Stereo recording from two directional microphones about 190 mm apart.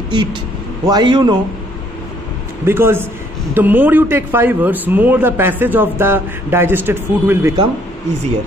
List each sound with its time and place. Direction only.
0.1 s a man's voice: 25° right (ahead or behind)
2.6 s a man's voice: 10° right (ahead or behind)